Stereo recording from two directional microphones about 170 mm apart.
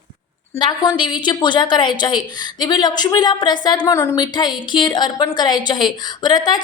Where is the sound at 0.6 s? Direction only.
25° left (ahead or behind).